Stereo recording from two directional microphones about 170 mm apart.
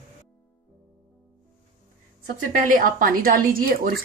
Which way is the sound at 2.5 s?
50° right (ahead or behind).